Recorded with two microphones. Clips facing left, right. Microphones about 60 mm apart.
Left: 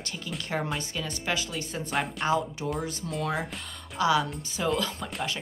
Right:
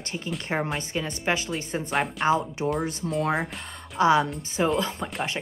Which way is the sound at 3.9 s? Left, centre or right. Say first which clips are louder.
Right 4 dB; right.